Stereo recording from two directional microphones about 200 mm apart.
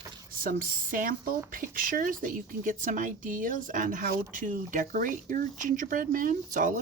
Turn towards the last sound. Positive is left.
turn(degrees=-40)  # may be behind; listen again after turning